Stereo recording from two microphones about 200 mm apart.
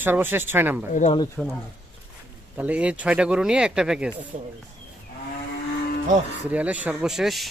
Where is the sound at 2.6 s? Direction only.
5° right (ahead or behind).